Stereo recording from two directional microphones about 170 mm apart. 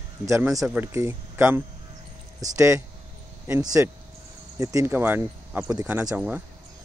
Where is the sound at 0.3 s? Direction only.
20° right (ahead or behind).